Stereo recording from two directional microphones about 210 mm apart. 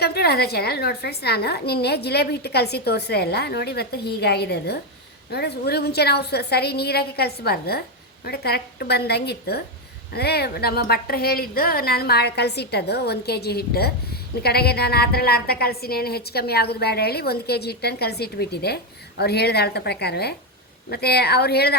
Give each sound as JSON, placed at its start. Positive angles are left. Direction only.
{"t": 0.0, "sound": "a woman's voice", "side_deg": 50}